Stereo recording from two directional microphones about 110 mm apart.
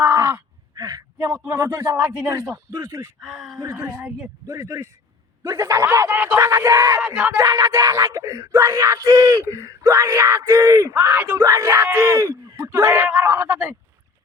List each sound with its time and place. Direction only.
0.1 s groan: 30° right (ahead or behind)
1.5 s speech: 30° right (ahead or behind)
3.2 s speech: centre (ahead or behind)
3.6 s speech: 25° right (ahead or behind)
7.0 s speech: 15° right (ahead or behind)
7.3 s speech: 30° right (ahead or behind)
11.4 s speech: 30° right (ahead or behind)
13.1 s speech: 15° right (ahead or behind)